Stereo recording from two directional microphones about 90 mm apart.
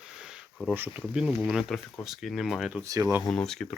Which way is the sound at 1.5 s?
5° right (ahead or behind).